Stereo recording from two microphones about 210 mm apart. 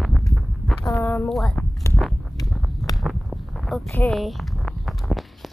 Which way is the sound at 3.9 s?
10° left (ahead or behind).